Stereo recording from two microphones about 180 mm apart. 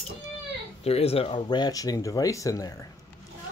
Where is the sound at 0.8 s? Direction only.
35° left (ahead or behind); by 2.7 s 20° left (ahead or behind).